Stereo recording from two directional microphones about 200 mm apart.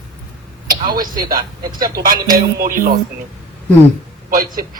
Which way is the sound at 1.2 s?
45° right (ahead or behind).